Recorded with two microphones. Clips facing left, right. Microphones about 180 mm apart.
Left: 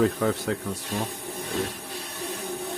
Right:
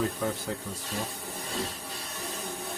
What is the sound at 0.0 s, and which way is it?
Speech, 85° left.